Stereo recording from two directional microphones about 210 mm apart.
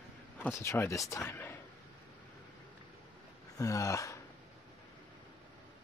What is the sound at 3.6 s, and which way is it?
Speech, 15° left (ahead or behind).